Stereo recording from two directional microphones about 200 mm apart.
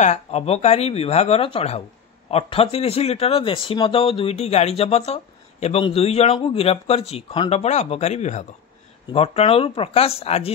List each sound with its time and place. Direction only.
0.0 s speech: 35° left (ahead or behind)